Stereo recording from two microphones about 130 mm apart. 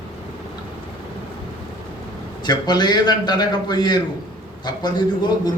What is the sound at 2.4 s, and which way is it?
A man's voice, 35° left (ahead or behind).